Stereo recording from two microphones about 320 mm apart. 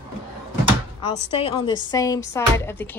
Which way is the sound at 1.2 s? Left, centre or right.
Centre.